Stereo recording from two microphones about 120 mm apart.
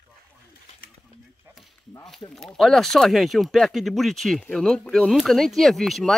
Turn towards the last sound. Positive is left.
turn(degrees=0)  # may be behind; listen again after turning